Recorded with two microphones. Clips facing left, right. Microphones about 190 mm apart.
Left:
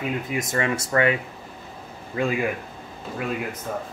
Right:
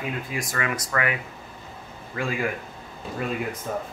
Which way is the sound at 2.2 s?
20° left (ahead or behind).